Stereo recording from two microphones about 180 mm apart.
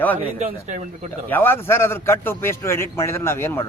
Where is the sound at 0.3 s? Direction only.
40° right (ahead or behind).